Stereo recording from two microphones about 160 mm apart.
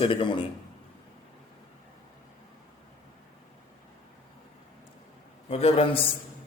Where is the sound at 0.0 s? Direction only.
30° left (ahead or behind).